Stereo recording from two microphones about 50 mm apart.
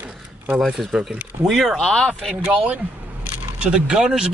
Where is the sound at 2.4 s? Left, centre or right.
Right.